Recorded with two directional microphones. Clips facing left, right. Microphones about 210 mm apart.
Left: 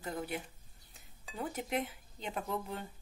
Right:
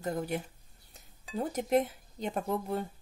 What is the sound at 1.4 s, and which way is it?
Speech, 40° right (ahead or behind).